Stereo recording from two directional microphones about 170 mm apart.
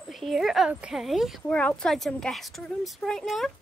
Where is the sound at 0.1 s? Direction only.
Centre (ahead or behind).